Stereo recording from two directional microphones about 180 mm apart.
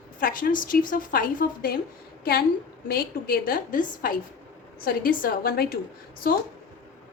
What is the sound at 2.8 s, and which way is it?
A woman's voice, 55° left (ahead or behind).